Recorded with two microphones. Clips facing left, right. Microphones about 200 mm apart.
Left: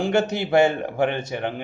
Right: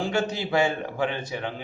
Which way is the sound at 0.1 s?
55° left (ahead or behind).